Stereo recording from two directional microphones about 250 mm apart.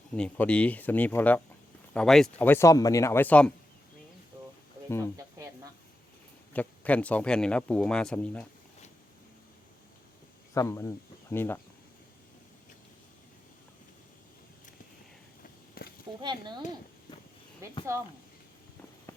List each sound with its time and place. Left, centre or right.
0.1 s speech: centre
6.5 s speech: centre
10.5 s speech: centre
15.8 s a sound: left
16.2 s speech: centre
17.1 s a sound: centre
17.6 s speech: centre